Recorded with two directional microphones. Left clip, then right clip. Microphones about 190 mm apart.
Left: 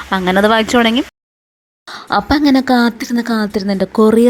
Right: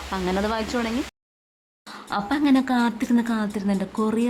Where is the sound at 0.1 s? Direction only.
30° left (ahead or behind).